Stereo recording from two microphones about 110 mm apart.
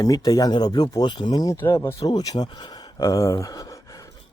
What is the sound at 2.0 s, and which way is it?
Speech, 35° left (ahead or behind).